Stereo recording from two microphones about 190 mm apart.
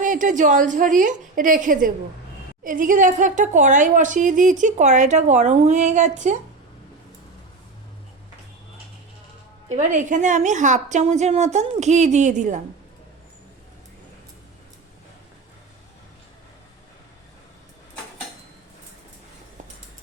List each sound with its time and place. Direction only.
0.0 s a woman's voice: 45° right (ahead or behind)
9.6 s speech: 40° right (ahead or behind)